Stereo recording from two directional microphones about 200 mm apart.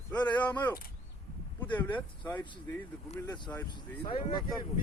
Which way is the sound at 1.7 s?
10° left (ahead or behind).